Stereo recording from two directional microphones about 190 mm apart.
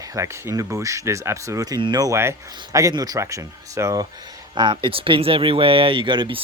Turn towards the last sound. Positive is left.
turn(degrees=-25)  # may be behind; listen again after turning